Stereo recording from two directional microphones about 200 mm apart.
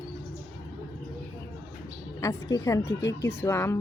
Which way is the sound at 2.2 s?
15° left (ahead or behind).